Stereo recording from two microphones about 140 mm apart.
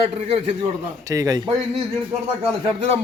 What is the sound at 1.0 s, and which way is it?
Speech, 25° right (ahead or behind).